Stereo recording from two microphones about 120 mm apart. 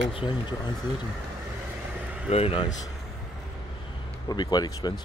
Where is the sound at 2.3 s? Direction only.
60° left (ahead or behind).